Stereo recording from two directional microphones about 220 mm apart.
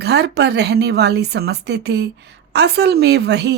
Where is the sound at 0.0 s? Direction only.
50° right (ahead or behind).